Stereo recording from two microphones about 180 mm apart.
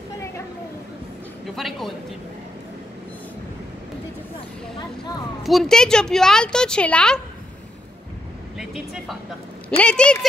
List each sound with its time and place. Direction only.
1.5 s speech: centre (ahead or behind)
5.4 s a woman's voice: centre (ahead or behind)
8.5 s a woman's voice: centre (ahead or behind)